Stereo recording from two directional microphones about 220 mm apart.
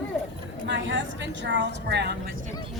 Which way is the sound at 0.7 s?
55° right (ahead or behind).